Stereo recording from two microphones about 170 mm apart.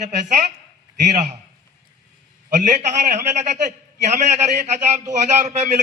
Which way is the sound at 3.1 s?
45° right (ahead or behind).